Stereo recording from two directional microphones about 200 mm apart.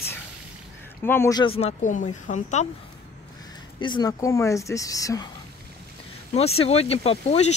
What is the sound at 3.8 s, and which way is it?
Speech, 20° left (ahead or behind).